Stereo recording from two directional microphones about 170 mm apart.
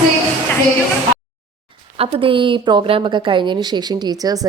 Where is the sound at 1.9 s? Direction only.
30° right (ahead or behind).